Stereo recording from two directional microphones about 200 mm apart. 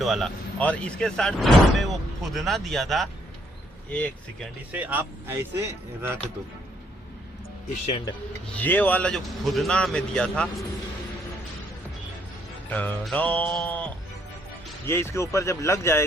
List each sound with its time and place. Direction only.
0.0 s a man's voice: centre (ahead or behind)
4.7 s speech: 10° right (ahead or behind)
7.8 s speech: 25° left (ahead or behind)
8.5 s a man's voice: 10° left (ahead or behind)
12.6 s speech: 10° left (ahead or behind)
14.9 s speech: 15° left (ahead or behind)